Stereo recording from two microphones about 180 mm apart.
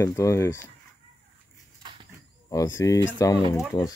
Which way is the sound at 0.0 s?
15° left (ahead or behind).